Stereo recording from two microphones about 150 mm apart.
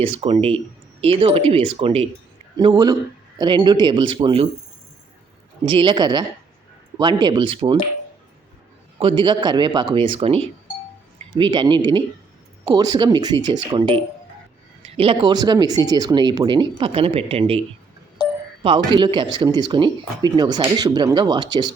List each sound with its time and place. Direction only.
0.0 s speech: 40° right (ahead or behind)
2.6 s speech: 30° right (ahead or behind)
5.6 s speech: 30° right (ahead or behind)
9.0 s speech: 35° right (ahead or behind)
18.2 s a sound: 30° left (ahead or behind)
18.9 s speech: 30° right (ahead or behind)